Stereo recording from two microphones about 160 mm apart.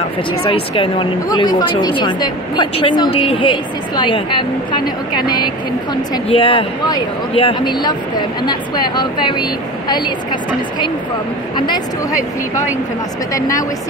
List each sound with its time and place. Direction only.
0.5 s a woman's voice: 30° left (ahead or behind)
11.5 s a woman's voice: 30° left (ahead or behind)